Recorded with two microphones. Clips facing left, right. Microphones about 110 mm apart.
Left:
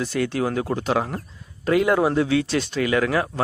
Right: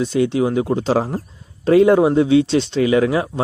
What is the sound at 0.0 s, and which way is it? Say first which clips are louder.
Speech: right 6 dB; 20° right (ahead or behind).